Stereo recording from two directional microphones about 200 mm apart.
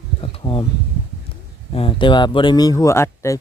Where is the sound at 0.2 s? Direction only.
25° left (ahead or behind).